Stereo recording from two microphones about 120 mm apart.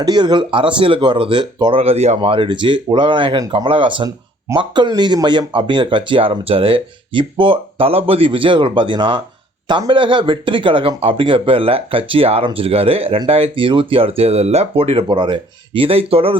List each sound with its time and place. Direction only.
0.0 s speech: 35° right (ahead or behind)
1.8 s speech: 60° right (ahead or behind)